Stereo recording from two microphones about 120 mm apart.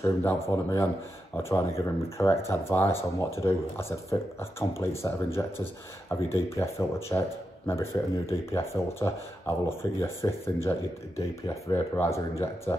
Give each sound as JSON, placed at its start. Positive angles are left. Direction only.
{"t": 0.0, "sound": "speech", "side_deg": 25}